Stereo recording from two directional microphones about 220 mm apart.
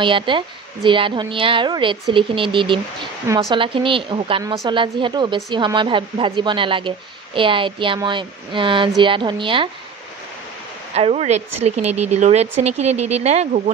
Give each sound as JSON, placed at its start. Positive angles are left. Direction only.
{"t": 0.0, "sound": "a woman's voice", "side_deg": -20}
{"t": 11.0, "sound": "a woman's voice", "side_deg": -30}